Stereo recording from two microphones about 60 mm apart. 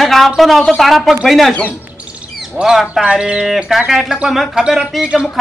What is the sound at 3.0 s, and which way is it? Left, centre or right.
Speech, centre.